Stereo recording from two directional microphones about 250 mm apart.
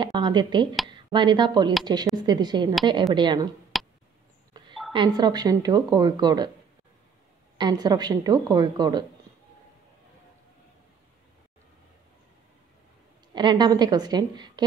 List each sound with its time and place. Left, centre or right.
0.0 s speech: centre
3.7 s a sound: centre
4.6 s a sound: centre
4.9 s speech: centre
7.5 s speech: centre
13.3 s speech: centre